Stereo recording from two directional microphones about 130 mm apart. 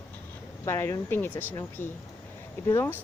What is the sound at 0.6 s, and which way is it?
Speech, 20° left (ahead or behind).